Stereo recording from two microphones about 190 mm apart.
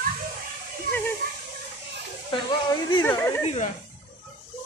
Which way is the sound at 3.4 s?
35° left (ahead or behind).